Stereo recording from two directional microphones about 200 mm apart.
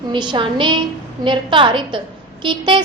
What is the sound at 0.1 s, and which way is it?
A woman's voice, 25° right (ahead or behind).